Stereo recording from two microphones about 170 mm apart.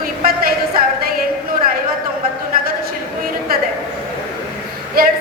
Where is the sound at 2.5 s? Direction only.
60° right (ahead or behind).